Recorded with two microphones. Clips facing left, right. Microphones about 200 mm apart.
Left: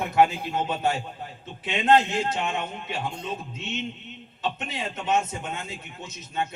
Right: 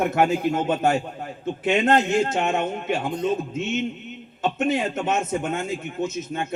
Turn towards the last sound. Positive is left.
turn(degrees=-50)  # may be behind; listen again after turning